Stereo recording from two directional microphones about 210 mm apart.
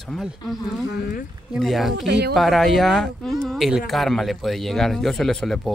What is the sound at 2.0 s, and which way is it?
Speech, 55° right (ahead or behind).